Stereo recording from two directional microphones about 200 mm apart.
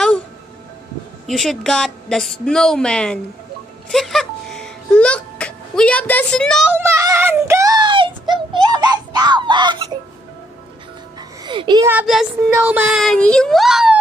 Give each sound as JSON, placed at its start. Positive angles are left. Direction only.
{"t": 1.2, "sound": "a woman's voice", "side_deg": 0}
{"t": 3.9, "sound": "music", "side_deg": 0}
{"t": 6.7, "sound": "child singing", "side_deg": -15}
{"t": 11.1, "sound": "music", "side_deg": -25}
{"t": 11.9, "sound": "speech", "side_deg": -5}
{"t": 13.0, "sound": "a woman's voice", "side_deg": 5}